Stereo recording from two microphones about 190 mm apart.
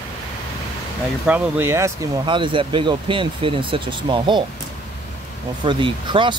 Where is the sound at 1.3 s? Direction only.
10° right (ahead or behind).